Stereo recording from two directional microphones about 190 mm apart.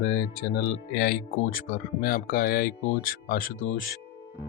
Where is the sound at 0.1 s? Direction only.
60° left (ahead or behind).